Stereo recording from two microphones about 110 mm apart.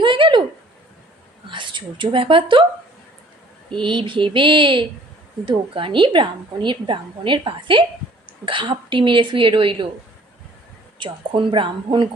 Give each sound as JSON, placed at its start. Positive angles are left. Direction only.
{"t": 0.0, "sound": "a sound", "side_deg": -50}
{"t": 1.5, "sound": "speech", "side_deg": -45}
{"t": 3.7, "sound": "a woman's voice", "side_deg": -50}
{"t": 11.0, "sound": "a woman's voice", "side_deg": -50}